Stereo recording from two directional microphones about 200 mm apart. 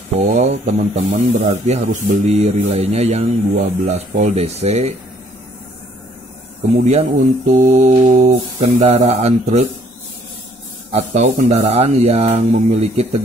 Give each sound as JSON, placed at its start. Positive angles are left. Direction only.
{"t": 0.2, "sound": "speech", "side_deg": -35}
{"t": 6.8, "sound": "speech", "side_deg": -35}
{"t": 10.9, "sound": "speech", "side_deg": -35}